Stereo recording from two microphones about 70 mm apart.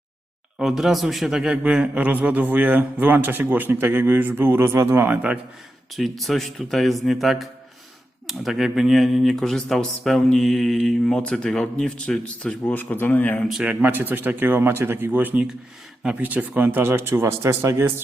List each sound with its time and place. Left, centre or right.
0.6 s a man's voice: centre; by 5.1 s right
5.1 s speech: centre
5.9 s speech: centre
12.6 s speech: left
13.7 s a man's voice: right